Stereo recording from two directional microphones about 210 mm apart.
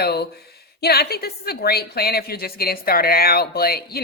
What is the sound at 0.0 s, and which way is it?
A woman's voice, 50° left (ahead or behind).